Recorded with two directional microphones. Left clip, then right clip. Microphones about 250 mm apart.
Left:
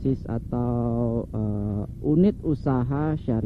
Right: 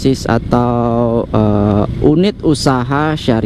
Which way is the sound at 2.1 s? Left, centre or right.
Centre.